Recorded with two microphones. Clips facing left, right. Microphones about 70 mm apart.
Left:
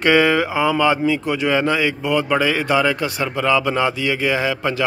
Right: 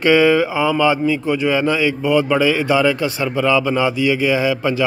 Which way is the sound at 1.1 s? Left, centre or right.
Left.